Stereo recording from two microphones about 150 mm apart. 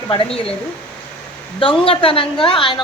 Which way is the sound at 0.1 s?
35° left (ahead or behind).